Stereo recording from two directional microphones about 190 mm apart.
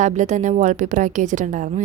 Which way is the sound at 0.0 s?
40° right (ahead or behind).